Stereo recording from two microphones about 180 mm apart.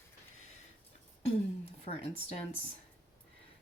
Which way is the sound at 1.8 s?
35° left (ahead or behind).